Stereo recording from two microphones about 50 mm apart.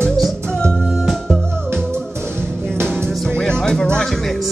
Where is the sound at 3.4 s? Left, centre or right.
Centre.